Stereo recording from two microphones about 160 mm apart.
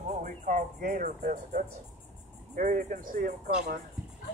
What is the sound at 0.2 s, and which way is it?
Speech, 55° right (ahead or behind).